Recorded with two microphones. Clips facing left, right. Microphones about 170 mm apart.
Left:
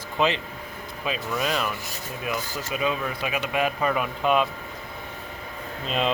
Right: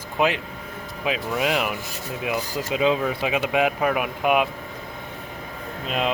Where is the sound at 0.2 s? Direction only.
10° right (ahead or behind).